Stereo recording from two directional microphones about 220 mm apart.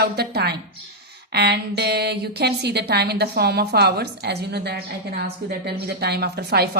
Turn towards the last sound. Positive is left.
turn(degrees=-45)  # may be behind; listen again after turning